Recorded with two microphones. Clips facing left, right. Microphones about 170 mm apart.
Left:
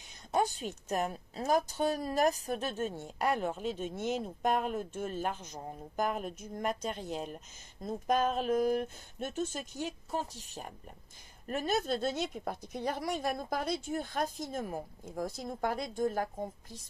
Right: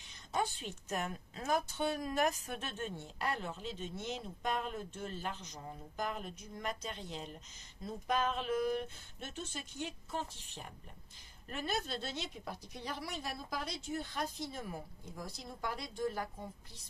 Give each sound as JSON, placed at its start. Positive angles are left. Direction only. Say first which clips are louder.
{"t": 0.3, "sound": "a woman's voice", "louder": "left 6 dB", "side_deg": 45}